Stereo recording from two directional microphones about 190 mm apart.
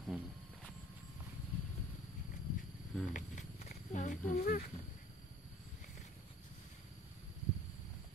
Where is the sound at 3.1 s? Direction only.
40° left (ahead or behind).